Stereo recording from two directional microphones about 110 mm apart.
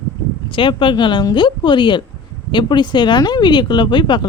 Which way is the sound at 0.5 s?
50° left (ahead or behind).